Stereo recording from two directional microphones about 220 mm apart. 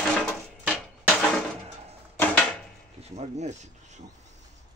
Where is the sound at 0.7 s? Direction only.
5° left (ahead or behind).